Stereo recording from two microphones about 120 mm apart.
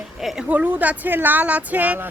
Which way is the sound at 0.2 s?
5° right (ahead or behind).